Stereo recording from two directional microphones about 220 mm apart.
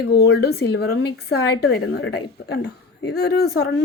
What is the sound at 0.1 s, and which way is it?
Speech, 45° left (ahead or behind).